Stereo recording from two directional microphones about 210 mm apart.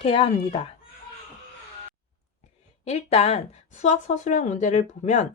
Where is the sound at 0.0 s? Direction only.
25° left (ahead or behind).